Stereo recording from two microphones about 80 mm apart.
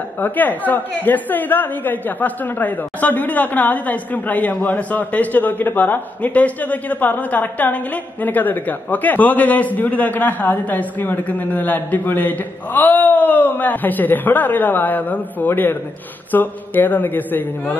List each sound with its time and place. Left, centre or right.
0.2 s a woman's voice: left